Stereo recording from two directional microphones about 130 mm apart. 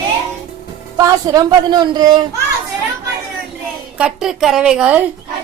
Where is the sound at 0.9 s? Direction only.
25° right (ahead or behind).